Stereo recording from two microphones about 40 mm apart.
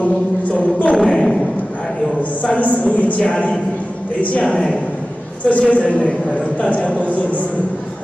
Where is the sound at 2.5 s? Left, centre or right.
Left.